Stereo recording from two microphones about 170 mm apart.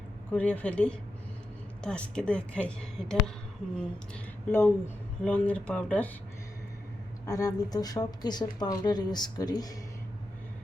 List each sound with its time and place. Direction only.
0.3 s a woman's voice: 10° left (ahead or behind)
7.3 s speech: 20° left (ahead or behind)